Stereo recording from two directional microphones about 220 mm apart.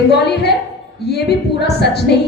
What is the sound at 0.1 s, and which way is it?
A woman's voice, 50° left (ahead or behind).